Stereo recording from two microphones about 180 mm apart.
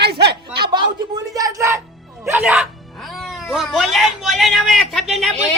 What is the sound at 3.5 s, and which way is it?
Speech, centre (ahead or behind).